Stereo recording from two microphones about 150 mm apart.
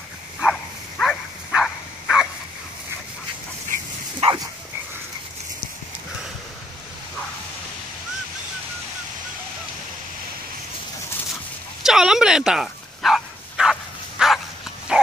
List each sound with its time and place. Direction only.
0.4 s a sound: centre (ahead or behind)
4.2 s dog: 40° right (ahead or behind)
11.8 s bow-wow: 5° right (ahead or behind)
14.9 s dog: 5° right (ahead or behind)